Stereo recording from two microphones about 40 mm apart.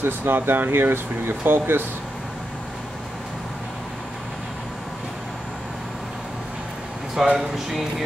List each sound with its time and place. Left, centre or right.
0.0 s speech: right
7.2 s speech: centre